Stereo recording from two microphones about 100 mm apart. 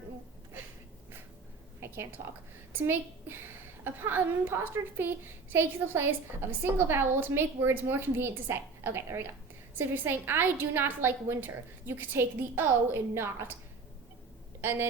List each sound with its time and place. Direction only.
1.8 s a sound: 25° right (ahead or behind)
2.7 s a woman's voice: 20° right (ahead or behind)
14.6 s speech: 25° right (ahead or behind)